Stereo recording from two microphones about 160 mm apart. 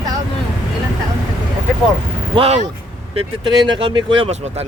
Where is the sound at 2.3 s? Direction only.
40° right (ahead or behind).